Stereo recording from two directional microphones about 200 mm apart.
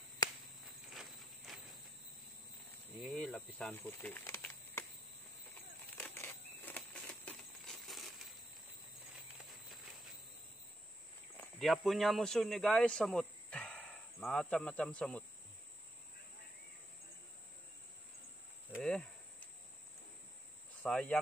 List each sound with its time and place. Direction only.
0.9 s clip-clop: centre (ahead or behind)
3.0 s snake: 5° left (ahead or behind)
5.9 s a sound: 10° left (ahead or behind)
11.3 s speech: centre (ahead or behind)
18.7 s cricket: 5° left (ahead or behind)
20.8 s cricket: 5° left (ahead or behind)